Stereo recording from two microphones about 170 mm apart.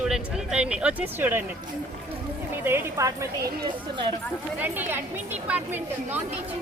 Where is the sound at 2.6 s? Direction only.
15° right (ahead or behind).